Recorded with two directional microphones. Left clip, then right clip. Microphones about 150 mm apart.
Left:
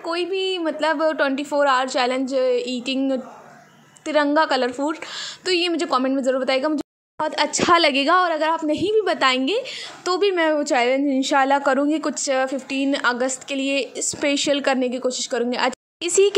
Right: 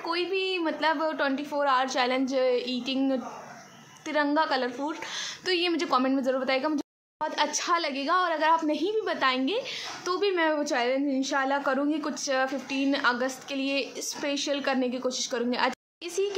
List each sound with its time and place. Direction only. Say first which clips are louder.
0.0 s a woman's voice: left 5 dB; 30° left (ahead or behind)
4.1 s a woman's voice: left 7 dB; 40° left (ahead or behind)
8.2 s a woman's voice: left 4 dB; 40° left (ahead or behind)
16.0 s speech: left 13 dB; 70° left (ahead or behind)